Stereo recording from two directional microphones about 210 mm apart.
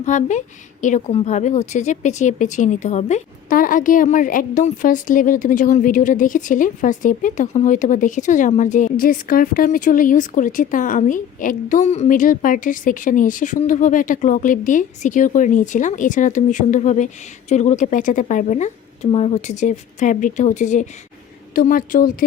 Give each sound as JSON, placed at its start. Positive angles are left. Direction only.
{"t": 0.0, "sound": "a woman's voice", "side_deg": 35}